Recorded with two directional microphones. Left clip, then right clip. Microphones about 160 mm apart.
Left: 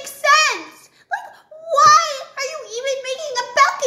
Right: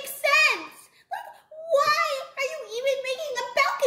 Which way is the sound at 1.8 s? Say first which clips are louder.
Left 14 dB; 20° right (ahead or behind).